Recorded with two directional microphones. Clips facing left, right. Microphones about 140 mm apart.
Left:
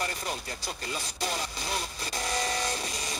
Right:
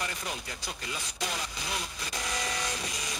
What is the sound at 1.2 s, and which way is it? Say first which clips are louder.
Speech: left 2 dB; 35° left (ahead or behind).